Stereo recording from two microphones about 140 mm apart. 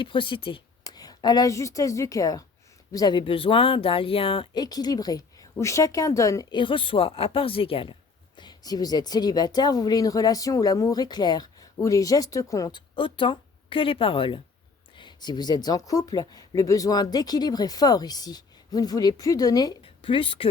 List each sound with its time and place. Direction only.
0.0 s a woman's voice: 35° left (ahead or behind)
4.6 s speech: 30° left (ahead or behind)
8.4 s speech: 30° left (ahead or behind)
19.8 s a woman's voice: 40° left (ahead or behind)